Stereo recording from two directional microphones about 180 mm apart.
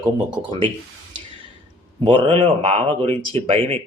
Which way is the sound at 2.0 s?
30° right (ahead or behind).